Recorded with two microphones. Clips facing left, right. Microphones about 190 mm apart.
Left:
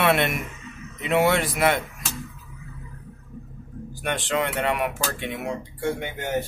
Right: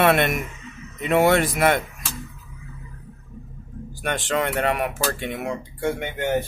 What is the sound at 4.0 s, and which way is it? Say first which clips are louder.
Speech: right 1 dB; 45° right (ahead or behind).